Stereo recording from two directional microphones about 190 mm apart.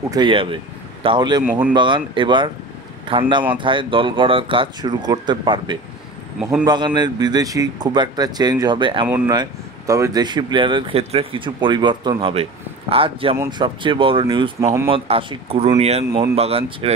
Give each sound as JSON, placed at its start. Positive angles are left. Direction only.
{"t": 0.1, "sound": "speech", "side_deg": -25}
{"t": 1.4, "sound": "speech", "side_deg": -5}
{"t": 1.7, "sound": "speech", "side_deg": -25}
{"t": 14.9, "sound": "speech", "side_deg": -30}